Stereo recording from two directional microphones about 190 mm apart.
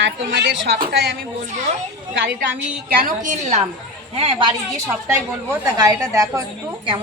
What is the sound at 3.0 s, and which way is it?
A woman's voice, 40° right (ahead or behind).